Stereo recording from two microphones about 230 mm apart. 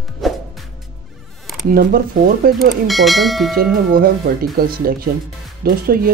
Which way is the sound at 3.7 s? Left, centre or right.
Right.